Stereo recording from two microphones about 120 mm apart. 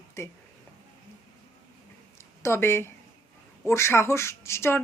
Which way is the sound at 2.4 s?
20° left (ahead or behind).